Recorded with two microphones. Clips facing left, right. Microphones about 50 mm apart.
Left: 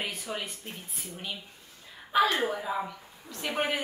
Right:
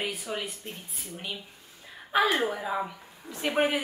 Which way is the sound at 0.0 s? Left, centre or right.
Centre.